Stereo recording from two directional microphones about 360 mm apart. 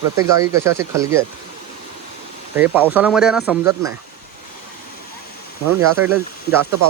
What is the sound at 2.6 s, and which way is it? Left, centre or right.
Speech, centre.